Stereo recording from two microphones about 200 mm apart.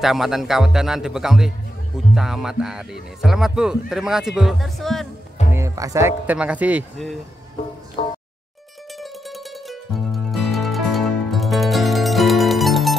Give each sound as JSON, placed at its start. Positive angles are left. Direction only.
{"t": 0.0, "sound": "speech", "side_deg": 0}
{"t": 5.5, "sound": "speech", "side_deg": -15}
{"t": 8.0, "sound": "music", "side_deg": 35}
{"t": 9.7, "sound": "music", "side_deg": 0}